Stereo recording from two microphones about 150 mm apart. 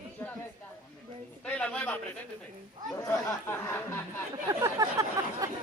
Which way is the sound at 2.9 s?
20° left (ahead or behind).